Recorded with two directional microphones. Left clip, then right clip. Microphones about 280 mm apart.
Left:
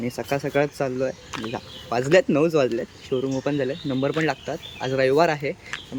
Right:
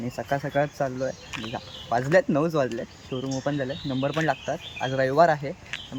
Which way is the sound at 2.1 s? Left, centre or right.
Centre.